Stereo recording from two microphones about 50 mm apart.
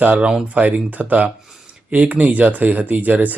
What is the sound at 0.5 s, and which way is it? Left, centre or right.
Speech, right.